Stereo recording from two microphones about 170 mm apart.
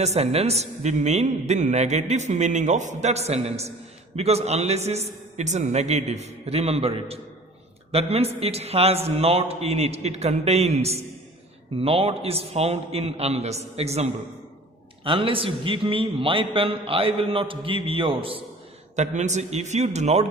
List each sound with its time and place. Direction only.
0.0 s a man's voice: 40° right (ahead or behind)
18.9 s a man's voice: 45° right (ahead or behind)